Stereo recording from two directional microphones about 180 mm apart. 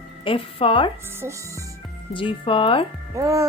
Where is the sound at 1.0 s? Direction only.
15° right (ahead or behind).